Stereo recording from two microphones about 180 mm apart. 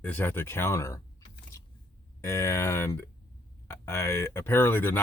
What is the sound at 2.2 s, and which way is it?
Speech, 15° left (ahead or behind).